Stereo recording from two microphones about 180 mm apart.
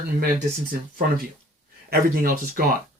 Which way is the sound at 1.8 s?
55° right (ahead or behind).